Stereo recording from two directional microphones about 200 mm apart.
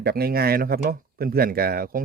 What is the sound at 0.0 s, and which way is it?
Speech, 50° right (ahead or behind).